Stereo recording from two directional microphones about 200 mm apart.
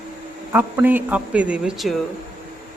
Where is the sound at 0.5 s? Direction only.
10° right (ahead or behind).